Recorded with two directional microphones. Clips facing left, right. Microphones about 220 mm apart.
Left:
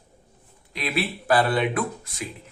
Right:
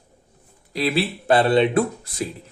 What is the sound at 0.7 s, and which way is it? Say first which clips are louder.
Speech: right 5 dB; 30° right (ahead or behind).